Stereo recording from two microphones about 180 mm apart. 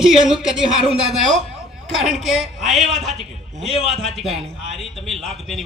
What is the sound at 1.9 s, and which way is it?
A man's voice, centre (ahead or behind).